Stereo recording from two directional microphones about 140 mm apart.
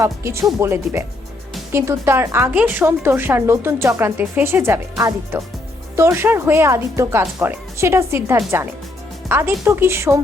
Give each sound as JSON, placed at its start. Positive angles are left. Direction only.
{"t": 0.0, "sound": "a woman's voice", "side_deg": -20}